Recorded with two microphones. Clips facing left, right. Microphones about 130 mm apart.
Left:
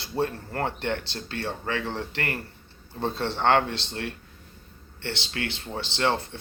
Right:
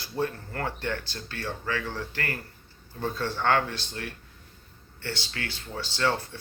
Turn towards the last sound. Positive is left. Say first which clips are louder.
# left 2 dB
turn(degrees=25)  # may be behind; listen again after turning